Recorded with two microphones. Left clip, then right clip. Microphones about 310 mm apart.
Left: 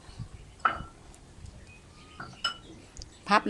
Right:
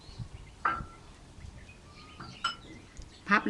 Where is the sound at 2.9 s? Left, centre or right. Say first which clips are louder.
Left 2 dB; centre.